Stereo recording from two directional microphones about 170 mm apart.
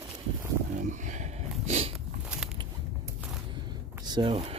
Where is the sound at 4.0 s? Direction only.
25° right (ahead or behind).